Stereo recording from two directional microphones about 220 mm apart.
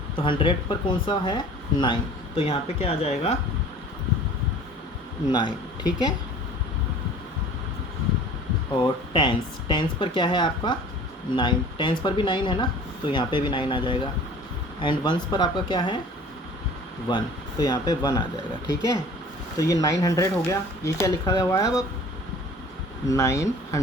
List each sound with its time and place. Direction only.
0.2 s a woman's voice: 25° left (ahead or behind)
5.3 s a woman's voice: 20° left (ahead or behind)
8.7 s a woman's voice: 20° left (ahead or behind)
17.1 s a woman's voice: 20° left (ahead or behind)
19.5 s speech: 15° left (ahead or behind)
23.0 s speech: 15° left (ahead or behind)